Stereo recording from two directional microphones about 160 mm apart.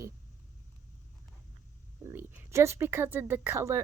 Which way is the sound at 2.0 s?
15° right (ahead or behind).